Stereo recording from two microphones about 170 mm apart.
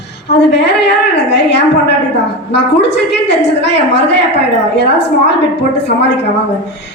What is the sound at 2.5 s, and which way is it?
A woman's voice, 90° left.